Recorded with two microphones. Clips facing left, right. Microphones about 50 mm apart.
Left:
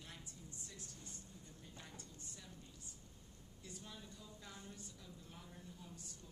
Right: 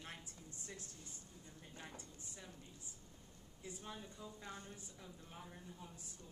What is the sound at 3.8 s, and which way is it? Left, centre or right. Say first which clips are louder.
A woman's voice: right 4 dB; right.